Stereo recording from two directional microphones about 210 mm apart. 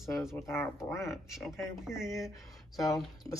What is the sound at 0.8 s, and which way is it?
Speech, 15° left (ahead or behind).